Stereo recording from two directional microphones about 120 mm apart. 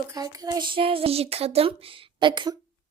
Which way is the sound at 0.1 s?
30° right (ahead or behind).